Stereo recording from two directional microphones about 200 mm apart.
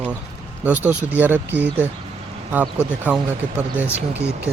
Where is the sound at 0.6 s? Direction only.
10° right (ahead or behind).